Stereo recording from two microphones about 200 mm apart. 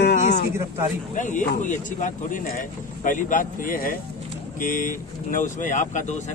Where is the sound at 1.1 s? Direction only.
40° left (ahead or behind).